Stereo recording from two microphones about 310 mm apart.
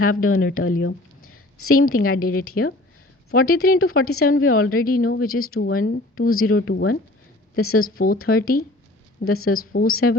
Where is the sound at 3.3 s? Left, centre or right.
Left.